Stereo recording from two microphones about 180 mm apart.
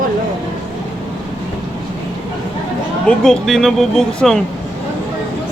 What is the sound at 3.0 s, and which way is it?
Speech, 5° left (ahead or behind).